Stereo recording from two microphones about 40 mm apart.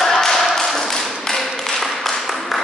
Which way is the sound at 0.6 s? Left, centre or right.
Centre.